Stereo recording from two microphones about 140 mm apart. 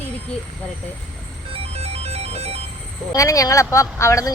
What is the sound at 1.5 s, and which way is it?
Music, 45° right (ahead or behind).